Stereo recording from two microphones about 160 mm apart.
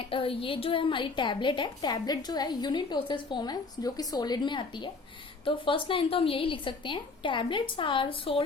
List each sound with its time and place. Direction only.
0.0 s a woman's voice: 35° left (ahead or behind)